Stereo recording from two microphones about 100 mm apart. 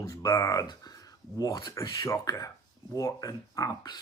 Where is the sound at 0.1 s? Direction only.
30° left (ahead or behind).